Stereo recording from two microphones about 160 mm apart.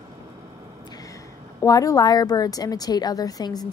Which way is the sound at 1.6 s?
20° left (ahead or behind).